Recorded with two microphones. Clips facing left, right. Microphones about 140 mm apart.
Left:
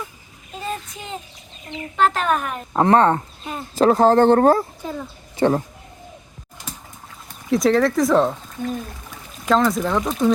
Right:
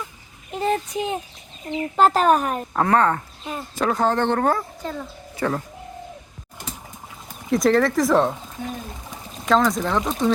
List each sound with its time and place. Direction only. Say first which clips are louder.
0.6 s speech: right 8 dB; 70° right (ahead or behind)
2.0 s speech: right 3 dB; 40° right (ahead or behind)
2.7 s speech: left 4 dB; 25° left (ahead or behind)
4.8 s speech: left 1 dB; 10° left (ahead or behind)
5.4 s speech: left 6 dB; 30° left (ahead or behind)
7.3 s speech: left 1 dB; centre (ahead or behind)